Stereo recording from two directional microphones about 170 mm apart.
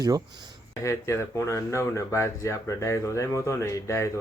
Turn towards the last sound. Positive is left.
turn(degrees=15)  # may be behind; listen again after turning